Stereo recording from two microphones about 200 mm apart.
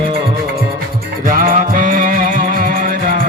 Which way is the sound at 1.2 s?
45° right (ahead or behind).